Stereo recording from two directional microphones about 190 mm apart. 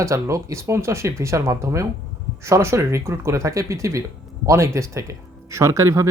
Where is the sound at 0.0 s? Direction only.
15° right (ahead or behind).